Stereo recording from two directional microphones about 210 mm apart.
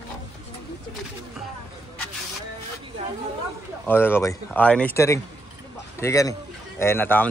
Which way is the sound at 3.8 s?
10° left (ahead or behind).